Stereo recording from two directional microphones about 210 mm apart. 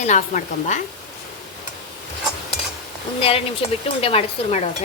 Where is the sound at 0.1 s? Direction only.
35° left (ahead or behind).